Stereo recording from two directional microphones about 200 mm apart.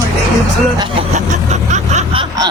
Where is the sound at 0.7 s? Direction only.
25° right (ahead or behind).